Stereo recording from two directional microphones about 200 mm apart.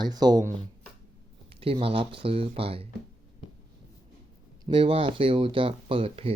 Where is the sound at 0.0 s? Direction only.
20° right (ahead or behind).